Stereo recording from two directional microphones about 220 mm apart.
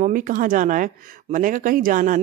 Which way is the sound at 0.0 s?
35° right (ahead or behind).